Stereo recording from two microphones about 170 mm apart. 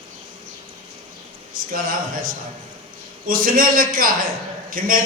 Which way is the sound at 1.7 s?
55° right (ahead or behind).